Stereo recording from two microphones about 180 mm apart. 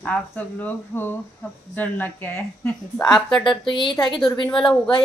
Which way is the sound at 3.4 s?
25° left (ahead or behind).